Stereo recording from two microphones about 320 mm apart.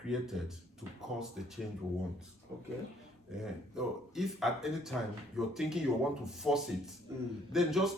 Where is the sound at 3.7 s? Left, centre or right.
Centre.